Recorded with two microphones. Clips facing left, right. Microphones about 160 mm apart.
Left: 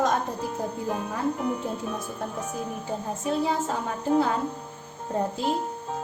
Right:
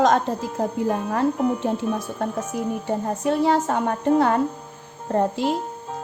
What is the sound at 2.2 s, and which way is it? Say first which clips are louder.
A woman's voice: right 7 dB; 75° right (ahead or behind).